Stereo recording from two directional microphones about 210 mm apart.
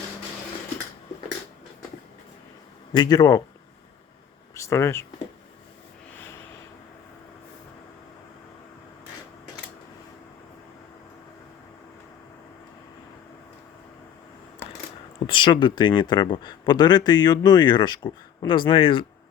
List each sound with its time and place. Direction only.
2.9 s speech: 20° left (ahead or behind)
4.5 s speech: 15° left (ahead or behind)
15.2 s speech: 25° left (ahead or behind)